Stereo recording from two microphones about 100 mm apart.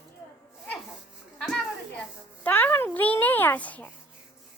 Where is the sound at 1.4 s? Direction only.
5° left (ahead or behind).